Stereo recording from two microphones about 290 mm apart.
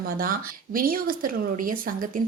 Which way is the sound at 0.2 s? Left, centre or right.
Right.